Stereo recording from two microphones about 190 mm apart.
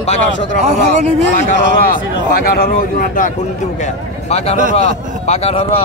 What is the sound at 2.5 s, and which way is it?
Speech, 50° left (ahead or behind).